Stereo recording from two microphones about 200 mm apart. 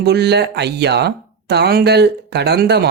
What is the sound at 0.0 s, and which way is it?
Speech, 55° right (ahead or behind).